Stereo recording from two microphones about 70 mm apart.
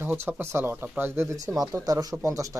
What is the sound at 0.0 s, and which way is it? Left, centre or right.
Speech, right.